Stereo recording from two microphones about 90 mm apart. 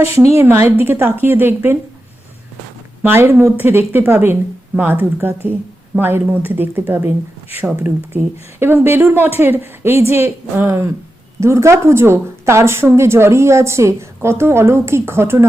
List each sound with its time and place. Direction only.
0.0 s speech: 30° right (ahead or behind)
3.0 s a woman's voice: 20° right (ahead or behind)